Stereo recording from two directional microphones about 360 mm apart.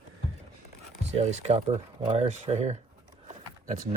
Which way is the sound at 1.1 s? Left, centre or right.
Centre.